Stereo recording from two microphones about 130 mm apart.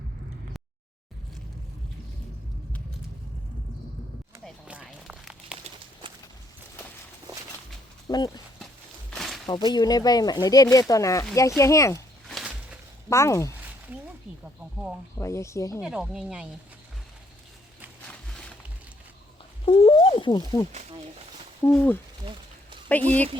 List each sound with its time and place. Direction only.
4.9 s crumpling: centre (ahead or behind)
8.0 s speech: 30° left (ahead or behind)
9.0 s a sound: centre (ahead or behind)
9.7 s speech: 30° left (ahead or behind)
13.1 s speech: 25° left (ahead or behind)
15.2 s speech: 20° left (ahead or behind)
15.8 s speech: 5° right (ahead or behind)
18.0 s a sound: 10° left (ahead or behind)
19.6 s speech: 40° left (ahead or behind)
21.6 s speech: 15° left (ahead or behind)